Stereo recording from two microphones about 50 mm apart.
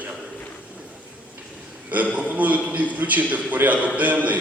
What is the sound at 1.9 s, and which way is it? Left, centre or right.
A man's voice, right.